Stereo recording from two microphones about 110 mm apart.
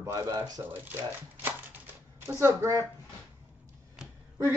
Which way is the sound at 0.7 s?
15° right (ahead or behind).